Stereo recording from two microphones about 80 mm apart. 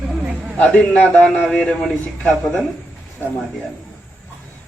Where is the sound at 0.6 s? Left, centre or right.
Centre.